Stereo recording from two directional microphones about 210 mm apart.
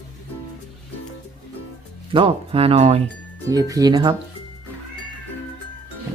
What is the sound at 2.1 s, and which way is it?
Speech, 25° right (ahead or behind).